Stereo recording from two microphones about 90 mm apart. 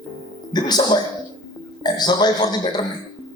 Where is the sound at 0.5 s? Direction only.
50° left (ahead or behind).